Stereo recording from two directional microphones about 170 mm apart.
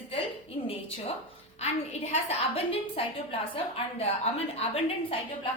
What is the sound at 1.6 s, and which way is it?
A woman's voice, 40° left (ahead or behind).